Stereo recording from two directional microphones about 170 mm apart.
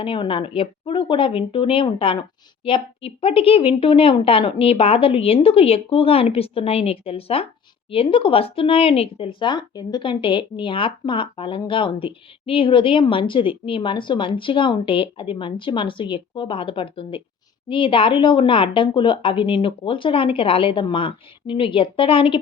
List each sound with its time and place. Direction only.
0.0 s speech: 30° left (ahead or behind)